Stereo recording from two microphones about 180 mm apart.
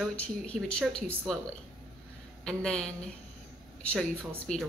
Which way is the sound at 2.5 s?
5° left (ahead or behind).